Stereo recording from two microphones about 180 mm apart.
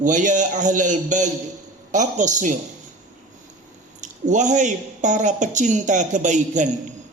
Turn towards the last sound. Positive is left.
turn(degrees=-40)  # may be behind; listen again after turning